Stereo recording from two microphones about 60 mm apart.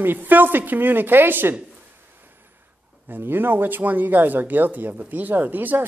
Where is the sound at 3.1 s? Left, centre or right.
Right.